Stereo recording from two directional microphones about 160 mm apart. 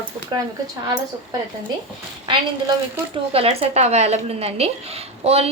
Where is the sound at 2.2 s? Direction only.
30° right (ahead or behind).